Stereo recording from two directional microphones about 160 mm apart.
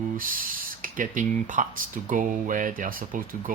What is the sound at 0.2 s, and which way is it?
Speech, 60° right (ahead or behind).